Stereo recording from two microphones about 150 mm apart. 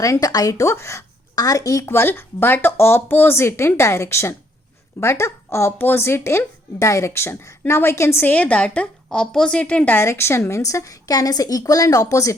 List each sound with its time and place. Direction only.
0.0 s speech: 20° left (ahead or behind)